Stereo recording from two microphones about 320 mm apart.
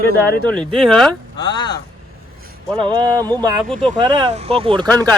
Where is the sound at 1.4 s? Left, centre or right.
Centre.